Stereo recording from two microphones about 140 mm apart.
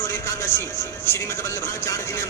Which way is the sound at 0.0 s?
20° left (ahead or behind).